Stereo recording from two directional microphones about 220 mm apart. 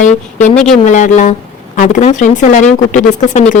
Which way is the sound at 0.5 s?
Centre (ahead or behind).